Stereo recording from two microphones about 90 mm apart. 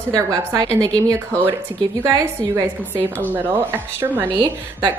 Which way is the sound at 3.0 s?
20° right (ahead or behind).